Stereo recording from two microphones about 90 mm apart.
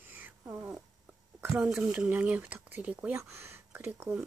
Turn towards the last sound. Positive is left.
turn(degrees=-20)  # may be behind; listen again after turning